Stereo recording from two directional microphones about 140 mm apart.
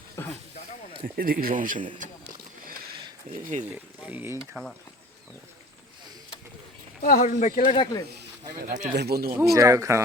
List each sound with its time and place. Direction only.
0.2 s a sound: 20° left (ahead or behind)
1.0 s speech: 90° right; by 1.8 s 70° right (ahead or behind)
3.2 s speech: 65° right (ahead or behind)
4.0 s speech: 15° right (ahead or behind)
4.6 s speech: 5° left (ahead or behind)
7.0 s speech: 80° left
7.6 s speech: 40° left (ahead or behind)
8.7 s speech: 70° right (ahead or behind)
9.6 s speech: 20° right (ahead or behind)